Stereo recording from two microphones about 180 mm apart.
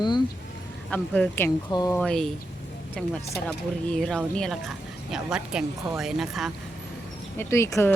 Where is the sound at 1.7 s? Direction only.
20° left (ahead or behind).